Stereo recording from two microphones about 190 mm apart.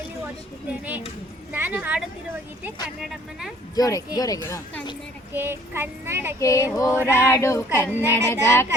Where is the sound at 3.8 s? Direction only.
20° left (ahead or behind).